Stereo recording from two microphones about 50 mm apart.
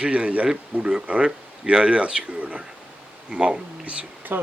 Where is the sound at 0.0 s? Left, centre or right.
Right.